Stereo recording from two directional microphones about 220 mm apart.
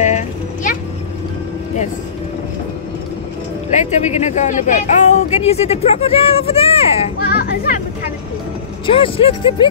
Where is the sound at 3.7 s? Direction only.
30° left (ahead or behind).